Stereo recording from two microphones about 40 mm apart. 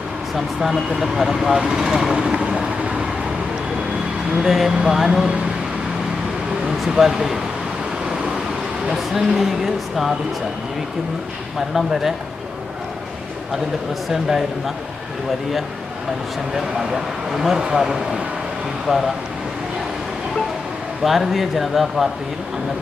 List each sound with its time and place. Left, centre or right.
0.3 s speech: centre
2.1 s vehicle: right
4.4 s speech: centre
6.8 s speech: centre
8.9 s speech: centre
14.1 s speech: centre
16.6 s speech: centre
21.0 s speech: centre